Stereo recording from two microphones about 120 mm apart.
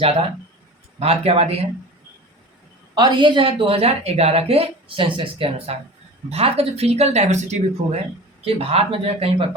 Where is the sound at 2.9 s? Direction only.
40° right (ahead or behind); by 8.0 s 75° right (ahead or behind).